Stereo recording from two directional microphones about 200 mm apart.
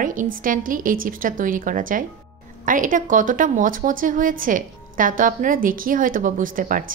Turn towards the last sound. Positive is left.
turn(degrees=-40)  # may be behind; listen again after turning